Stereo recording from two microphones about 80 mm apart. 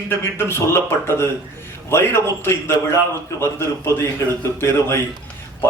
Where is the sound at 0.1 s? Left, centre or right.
Left.